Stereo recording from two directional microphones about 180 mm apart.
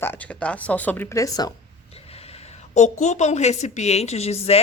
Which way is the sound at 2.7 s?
40° left (ahead or behind).